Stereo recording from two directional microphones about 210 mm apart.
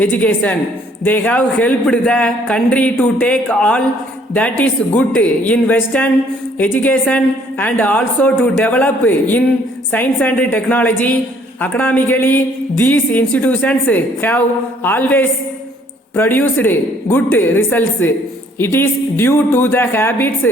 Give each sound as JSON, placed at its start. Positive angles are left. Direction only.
{"t": 0.0, "sound": "a woman's voice", "side_deg": 10}